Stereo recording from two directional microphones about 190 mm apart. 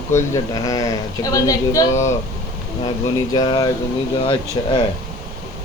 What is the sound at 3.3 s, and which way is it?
Speech, 20° left (ahead or behind).